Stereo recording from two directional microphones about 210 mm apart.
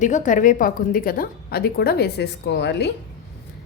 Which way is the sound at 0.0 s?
35° left (ahead or behind).